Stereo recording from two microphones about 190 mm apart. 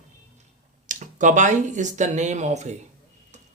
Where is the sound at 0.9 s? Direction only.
40° right (ahead or behind).